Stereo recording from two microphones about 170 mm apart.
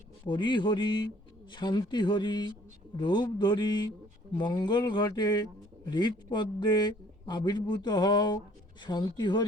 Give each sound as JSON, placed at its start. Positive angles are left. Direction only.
{"t": 0.3, "sound": "a man's voice", "side_deg": 25}